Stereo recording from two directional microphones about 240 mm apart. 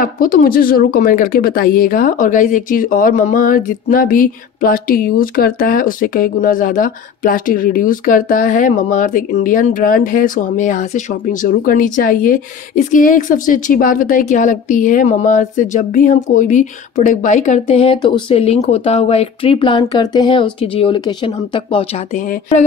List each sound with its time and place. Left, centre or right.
0.0 s speech: left